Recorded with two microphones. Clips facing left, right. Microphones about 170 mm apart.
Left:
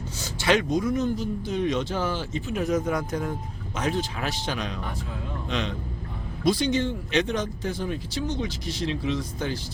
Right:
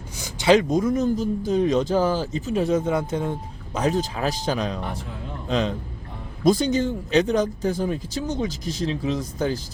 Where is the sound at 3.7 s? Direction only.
40° right (ahead or behind).